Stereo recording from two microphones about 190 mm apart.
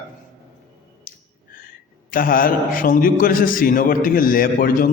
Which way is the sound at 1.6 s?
45° left (ahead or behind).